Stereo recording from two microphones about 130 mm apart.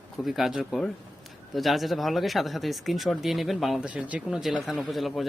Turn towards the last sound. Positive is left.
turn(degrees=0)  # may be behind; listen again after turning